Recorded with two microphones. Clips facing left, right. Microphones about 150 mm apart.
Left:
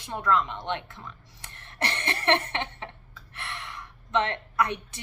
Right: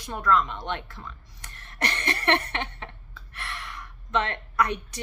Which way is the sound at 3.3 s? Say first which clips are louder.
Right 1 dB; 20° left (ahead or behind).